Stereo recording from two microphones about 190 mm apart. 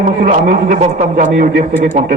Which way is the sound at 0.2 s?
45° right (ahead or behind).